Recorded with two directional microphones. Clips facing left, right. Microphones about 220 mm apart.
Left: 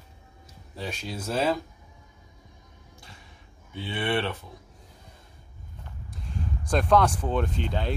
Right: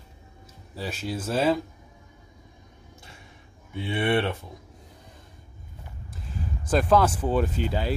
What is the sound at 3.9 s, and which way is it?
Speech, 25° right (ahead or behind).